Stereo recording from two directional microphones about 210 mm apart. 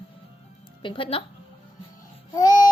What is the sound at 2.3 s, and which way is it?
Babbling, 20° left (ahead or behind).